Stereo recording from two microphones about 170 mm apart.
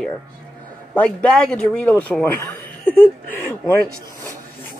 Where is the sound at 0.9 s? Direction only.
5° left (ahead or behind).